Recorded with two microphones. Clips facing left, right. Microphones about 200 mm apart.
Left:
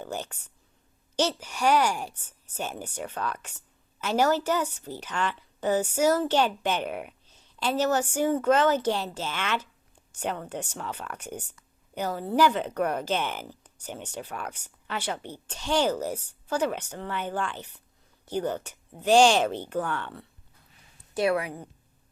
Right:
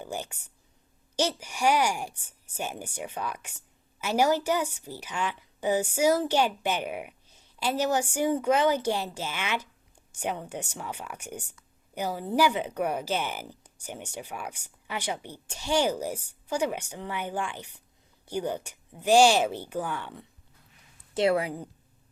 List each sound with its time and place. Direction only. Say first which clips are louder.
0.0 s a woman's voice: left 1 dB; 10° right (ahead or behind)
21.1 s a woman's voice: right 1 dB; 25° right (ahead or behind)